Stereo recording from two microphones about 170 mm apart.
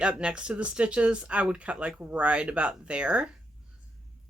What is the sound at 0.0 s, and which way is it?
Speech, 5° right (ahead or behind).